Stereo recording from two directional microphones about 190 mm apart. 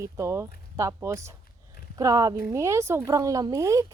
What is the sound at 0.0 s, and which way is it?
Speech, 15° right (ahead or behind).